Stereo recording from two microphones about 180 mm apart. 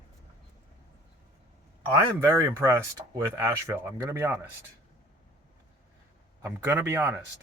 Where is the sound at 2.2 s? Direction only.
15° right (ahead or behind).